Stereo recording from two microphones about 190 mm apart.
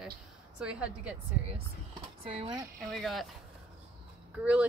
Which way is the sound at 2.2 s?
30° right (ahead or behind).